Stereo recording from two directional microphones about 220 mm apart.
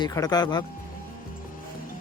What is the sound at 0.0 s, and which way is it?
Speech, 20° left (ahead or behind).